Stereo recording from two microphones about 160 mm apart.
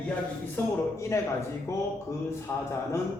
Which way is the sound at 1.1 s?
15° left (ahead or behind).